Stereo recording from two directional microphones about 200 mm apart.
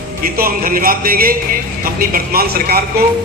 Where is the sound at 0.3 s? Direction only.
45° right (ahead or behind).